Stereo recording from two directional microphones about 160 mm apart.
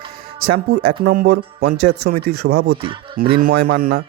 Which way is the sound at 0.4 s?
90° right.